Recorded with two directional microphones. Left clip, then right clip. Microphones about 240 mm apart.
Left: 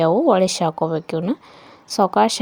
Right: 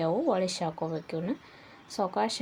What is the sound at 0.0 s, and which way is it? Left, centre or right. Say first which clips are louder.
Speech: left 12 dB; left.